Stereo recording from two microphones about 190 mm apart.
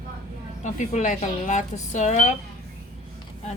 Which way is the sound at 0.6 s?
40° left (ahead or behind).